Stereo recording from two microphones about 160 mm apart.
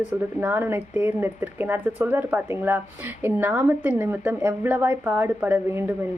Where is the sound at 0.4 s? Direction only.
10° right (ahead or behind).